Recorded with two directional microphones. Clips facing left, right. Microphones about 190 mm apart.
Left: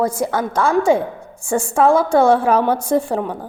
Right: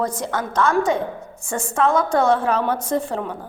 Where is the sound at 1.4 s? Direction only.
30° left (ahead or behind).